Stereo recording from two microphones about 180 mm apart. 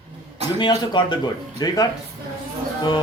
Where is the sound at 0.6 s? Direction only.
25° left (ahead or behind).